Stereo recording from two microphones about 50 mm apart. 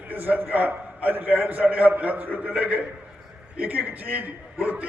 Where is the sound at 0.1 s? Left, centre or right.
Right.